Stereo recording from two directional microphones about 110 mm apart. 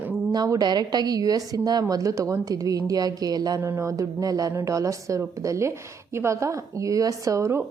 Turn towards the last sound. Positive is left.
turn(degrees=-25)  # may be behind; listen again after turning